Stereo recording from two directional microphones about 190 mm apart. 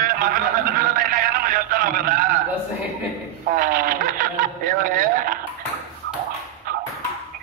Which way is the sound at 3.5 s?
50° right (ahead or behind).